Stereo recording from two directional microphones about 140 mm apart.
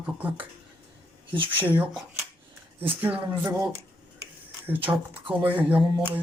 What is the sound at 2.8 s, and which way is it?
Speech, 10° right (ahead or behind).